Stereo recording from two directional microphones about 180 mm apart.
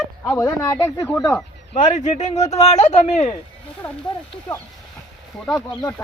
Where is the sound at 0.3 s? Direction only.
15° left (ahead or behind).